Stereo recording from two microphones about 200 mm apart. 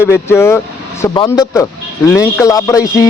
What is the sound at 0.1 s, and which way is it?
Speech, 10° left (ahead or behind).